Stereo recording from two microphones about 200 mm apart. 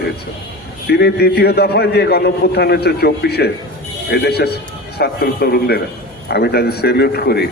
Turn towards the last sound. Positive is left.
turn(degrees=50)  # may be behind; listen again after turning